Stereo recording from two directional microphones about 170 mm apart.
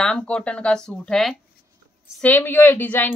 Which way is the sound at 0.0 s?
5° left (ahead or behind).